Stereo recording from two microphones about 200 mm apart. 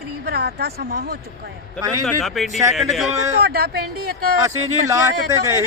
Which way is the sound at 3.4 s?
55° right (ahead or behind).